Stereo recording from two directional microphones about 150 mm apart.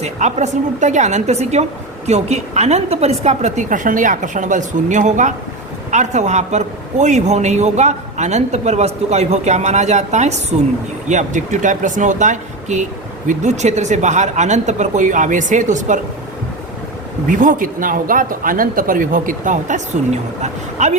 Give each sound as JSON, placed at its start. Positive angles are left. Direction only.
{"t": 0.0, "sound": "a man's voice", "side_deg": -50}
{"t": 17.2, "sound": "a man's voice", "side_deg": -60}